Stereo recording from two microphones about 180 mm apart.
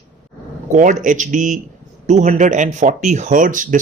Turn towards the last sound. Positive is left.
turn(degrees=-50)  # may be behind; listen again after turning